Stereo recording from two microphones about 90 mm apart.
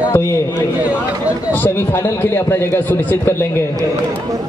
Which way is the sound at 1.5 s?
20° left (ahead or behind).